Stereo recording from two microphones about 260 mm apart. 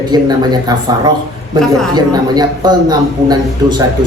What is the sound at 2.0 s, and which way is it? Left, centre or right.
Speech, centre.